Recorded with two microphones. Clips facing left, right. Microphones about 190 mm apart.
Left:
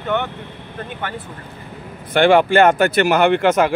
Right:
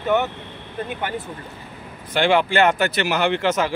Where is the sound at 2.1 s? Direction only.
50° left (ahead or behind).